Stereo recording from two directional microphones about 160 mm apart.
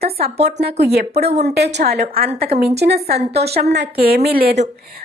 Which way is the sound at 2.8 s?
90° right.